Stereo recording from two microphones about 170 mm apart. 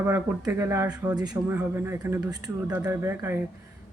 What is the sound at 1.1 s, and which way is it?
Speech, 25° right (ahead or behind).